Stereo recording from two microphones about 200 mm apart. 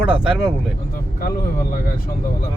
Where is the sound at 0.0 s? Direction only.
5° right (ahead or behind).